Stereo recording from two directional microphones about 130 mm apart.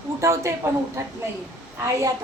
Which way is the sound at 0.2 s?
20° right (ahead or behind).